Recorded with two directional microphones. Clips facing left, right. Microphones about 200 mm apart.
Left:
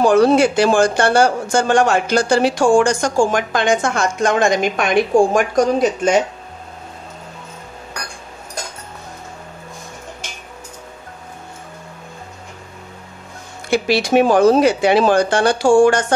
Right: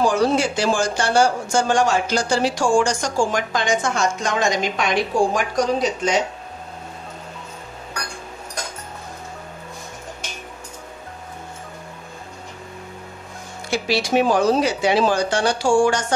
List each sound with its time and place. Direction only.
0.0 s speech: 60° left (ahead or behind)
13.7 s speech: 55° left (ahead or behind)